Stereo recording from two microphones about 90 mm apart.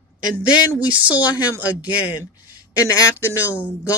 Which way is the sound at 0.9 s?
15° right (ahead or behind).